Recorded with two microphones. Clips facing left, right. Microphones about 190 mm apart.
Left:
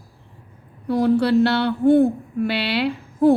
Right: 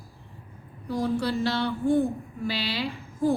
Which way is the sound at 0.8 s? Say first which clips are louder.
Left 9 dB; 65° left (ahead or behind).